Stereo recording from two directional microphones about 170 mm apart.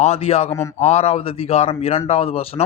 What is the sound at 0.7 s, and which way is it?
Speech, 40° left (ahead or behind).